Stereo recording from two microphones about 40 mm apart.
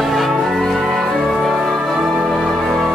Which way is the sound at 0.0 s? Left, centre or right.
Centre.